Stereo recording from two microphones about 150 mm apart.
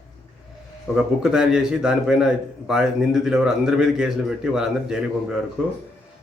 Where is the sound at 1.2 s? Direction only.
5° right (ahead or behind).